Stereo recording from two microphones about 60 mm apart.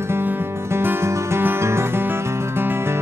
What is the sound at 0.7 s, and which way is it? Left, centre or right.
Music, right.